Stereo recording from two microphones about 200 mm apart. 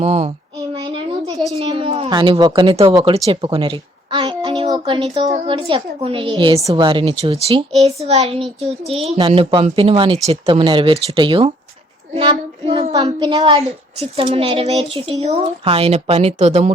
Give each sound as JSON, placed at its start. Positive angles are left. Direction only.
{"t": 0.0, "sound": "child singing", "side_deg": -30}
{"t": 1.5, "sound": "a woman's voice", "side_deg": -25}
{"t": 12.1, "sound": "child singing", "side_deg": -25}
{"t": 13.1, "sound": "speech", "side_deg": -25}